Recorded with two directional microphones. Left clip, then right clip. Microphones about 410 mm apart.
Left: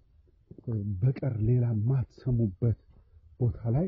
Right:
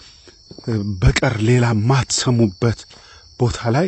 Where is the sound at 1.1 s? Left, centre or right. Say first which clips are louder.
Right 18 dB; centre.